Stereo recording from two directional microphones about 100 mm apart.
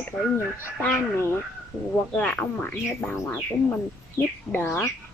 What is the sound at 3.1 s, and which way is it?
Child singing, 25° left (ahead or behind).